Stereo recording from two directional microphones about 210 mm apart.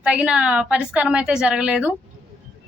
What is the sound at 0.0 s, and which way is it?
A woman's voice, 5° right (ahead or behind).